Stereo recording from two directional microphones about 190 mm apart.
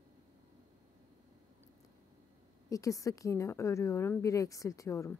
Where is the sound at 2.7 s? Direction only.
15° left (ahead or behind).